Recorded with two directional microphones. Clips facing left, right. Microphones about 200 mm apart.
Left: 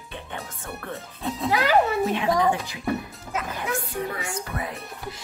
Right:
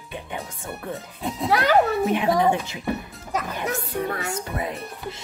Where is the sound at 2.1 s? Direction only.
20° right (ahead or behind).